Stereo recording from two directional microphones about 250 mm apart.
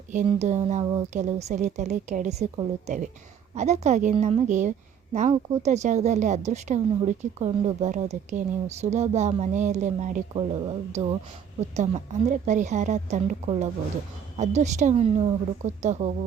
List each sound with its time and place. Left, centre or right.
0.1 s speech: right